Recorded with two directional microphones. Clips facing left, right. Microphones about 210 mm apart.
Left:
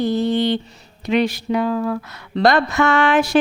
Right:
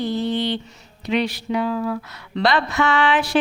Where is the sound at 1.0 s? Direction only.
45° left (ahead or behind).